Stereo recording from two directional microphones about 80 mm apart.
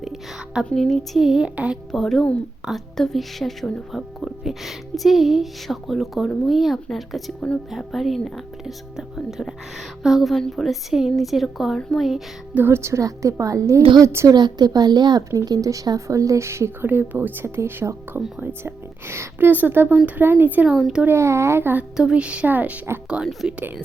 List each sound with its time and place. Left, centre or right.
0.0 s a sound: centre
0.6 s a woman's voice: centre
1.5 s speech: centre
1.9 s a woman's voice: centre
12.5 s speech: right
14.3 s speech: right
15.4 s speech: right
20.7 s a woman's voice: centre
21.0 s speech: right
21.9 s speech: centre
23.0 s speech: centre